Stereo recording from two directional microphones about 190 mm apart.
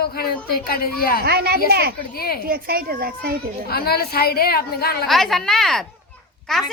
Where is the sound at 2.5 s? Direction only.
50° right (ahead or behind).